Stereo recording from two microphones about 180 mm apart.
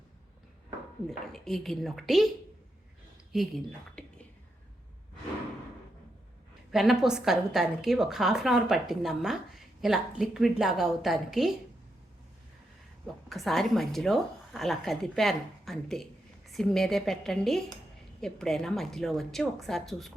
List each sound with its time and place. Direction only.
1.3 s a woman's voice: centre (ahead or behind)
3.3 s a woman's voice: centre (ahead or behind)
6.7 s a woman's voice: centre (ahead or behind)
13.2 s a woman's voice: centre (ahead or behind)